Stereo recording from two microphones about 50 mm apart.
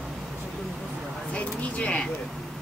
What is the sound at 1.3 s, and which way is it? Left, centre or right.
Speech, left.